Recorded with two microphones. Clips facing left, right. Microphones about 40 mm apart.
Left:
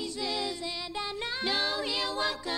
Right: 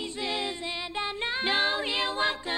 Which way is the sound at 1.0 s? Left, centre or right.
Right.